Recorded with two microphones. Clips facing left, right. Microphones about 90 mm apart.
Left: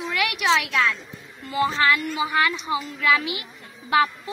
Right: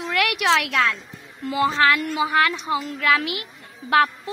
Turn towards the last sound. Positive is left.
turn(degrees=-60)  # may be behind; listen again after turning